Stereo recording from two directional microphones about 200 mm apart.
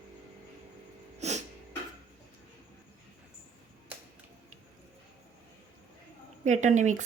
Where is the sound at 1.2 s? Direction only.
35° right (ahead or behind).